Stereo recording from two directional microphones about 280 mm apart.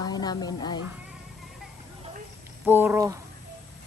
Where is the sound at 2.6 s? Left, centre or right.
Centre.